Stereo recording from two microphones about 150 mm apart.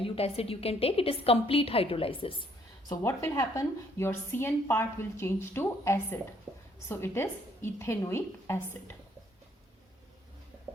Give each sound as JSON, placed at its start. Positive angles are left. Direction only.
{"t": 0.0, "sound": "a woman's voice", "side_deg": 40}
{"t": 2.9, "sound": "a woman's voice", "side_deg": 20}